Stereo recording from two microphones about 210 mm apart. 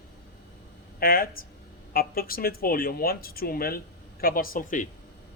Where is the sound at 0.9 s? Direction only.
45° left (ahead or behind).